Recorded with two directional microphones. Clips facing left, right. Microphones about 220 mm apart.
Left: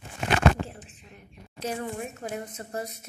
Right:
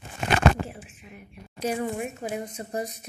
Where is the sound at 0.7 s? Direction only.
10° right (ahead or behind).